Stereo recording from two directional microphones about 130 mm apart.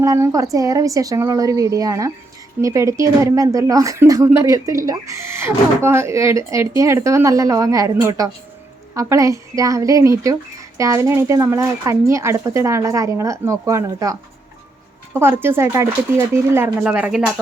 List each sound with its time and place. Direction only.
0.0 s speech: 25° right (ahead or behind)
16.8 s speech: 5° right (ahead or behind)